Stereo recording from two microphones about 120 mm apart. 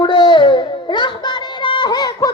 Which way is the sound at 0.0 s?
45° left (ahead or behind).